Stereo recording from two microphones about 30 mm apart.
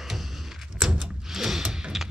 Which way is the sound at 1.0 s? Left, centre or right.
Centre.